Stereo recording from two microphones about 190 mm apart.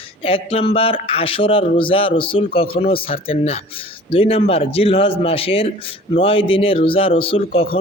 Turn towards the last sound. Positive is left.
turn(degrees=30)  # may be behind; listen again after turning